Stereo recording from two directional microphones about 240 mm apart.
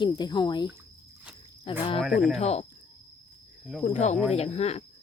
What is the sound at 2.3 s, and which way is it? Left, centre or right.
Speech, left.